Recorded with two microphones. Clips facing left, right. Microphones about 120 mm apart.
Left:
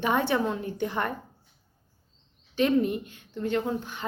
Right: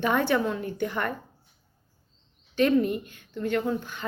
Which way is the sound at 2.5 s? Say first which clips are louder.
Right 1 dB; 20° left (ahead or behind).